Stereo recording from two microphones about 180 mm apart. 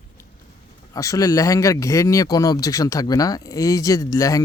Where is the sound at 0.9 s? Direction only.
20° left (ahead or behind).